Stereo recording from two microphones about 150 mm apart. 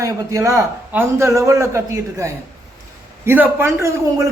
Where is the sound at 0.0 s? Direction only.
20° right (ahead or behind).